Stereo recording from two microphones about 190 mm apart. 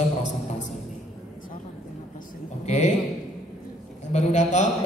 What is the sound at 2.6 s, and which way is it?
Speech, 35° left (ahead or behind).